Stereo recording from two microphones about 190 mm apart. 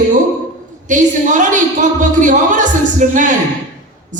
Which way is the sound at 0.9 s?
40° right (ahead or behind).